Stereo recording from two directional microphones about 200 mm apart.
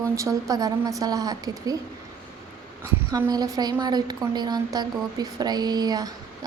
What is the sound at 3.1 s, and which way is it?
A woman's voice, 20° right (ahead or behind).